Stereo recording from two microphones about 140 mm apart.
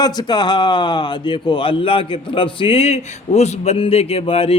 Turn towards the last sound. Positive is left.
turn(degrees=45)  # may be behind; listen again after turning